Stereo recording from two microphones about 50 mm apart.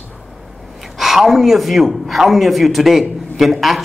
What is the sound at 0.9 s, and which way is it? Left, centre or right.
A man's voice, centre.